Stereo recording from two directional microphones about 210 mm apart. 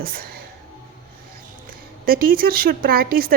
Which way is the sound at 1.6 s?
45° right (ahead or behind).